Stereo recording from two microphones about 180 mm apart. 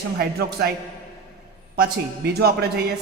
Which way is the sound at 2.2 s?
60° right (ahead or behind).